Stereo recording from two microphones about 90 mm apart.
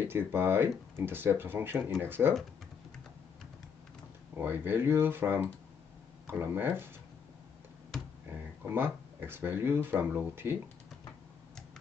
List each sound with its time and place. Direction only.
0.0 s speech: 25° right (ahead or behind)
4.4 s speech: 20° right (ahead or behind)
8.6 s speech: 25° right (ahead or behind)